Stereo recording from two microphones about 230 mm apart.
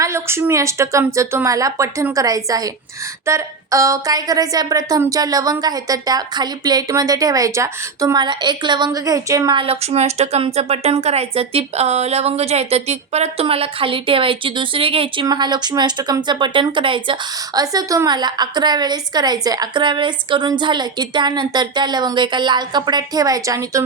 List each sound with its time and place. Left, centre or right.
0.0 s a woman's voice: centre